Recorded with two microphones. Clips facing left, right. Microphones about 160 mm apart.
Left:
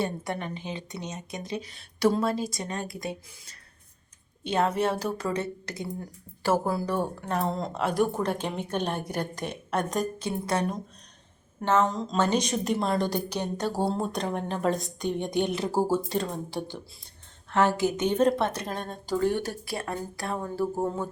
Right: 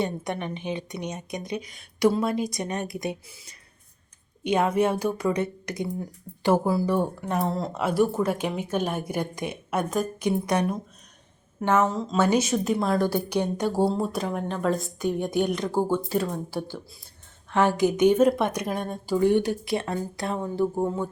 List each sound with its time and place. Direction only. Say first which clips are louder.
0.0 s a woman's voice: right 2 dB; 20° right (ahead or behind)
1.5 s speech: right 2 dB; 30° left (ahead or behind)
2.0 s a woman's voice: right 2 dB; 15° right (ahead or behind)
4.4 s a woman's voice: right 3 dB; 15° right (ahead or behind)
13.3 s speech: right 5 dB; 15° right (ahead or behind)
13.8 s a woman's voice: right 3 dB; centre (ahead or behind)
16.6 s speech: right 2 dB; 20° left (ahead or behind)
17.5 s speech: right 2 dB; 15° right (ahead or behind)